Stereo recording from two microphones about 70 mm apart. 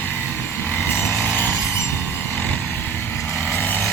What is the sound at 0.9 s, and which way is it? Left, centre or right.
Vehicle, left.